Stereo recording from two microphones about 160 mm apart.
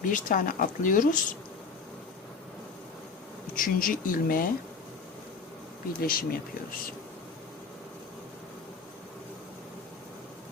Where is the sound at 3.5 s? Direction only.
60° left (ahead or behind).